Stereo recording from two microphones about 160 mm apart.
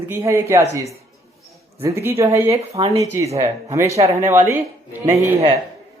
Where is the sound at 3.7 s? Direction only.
20° right (ahead or behind).